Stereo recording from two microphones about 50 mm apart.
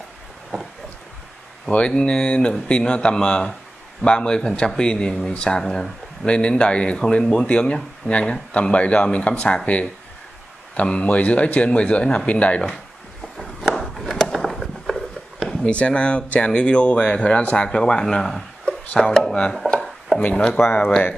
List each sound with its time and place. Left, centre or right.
1.7 s speech: left
10.8 s speech: left
13.4 s a sound: centre
15.6 s speech: left; by 19.1 s centre
19.6 s chopping: left
20.2 s speech: left
20.5 s speech: left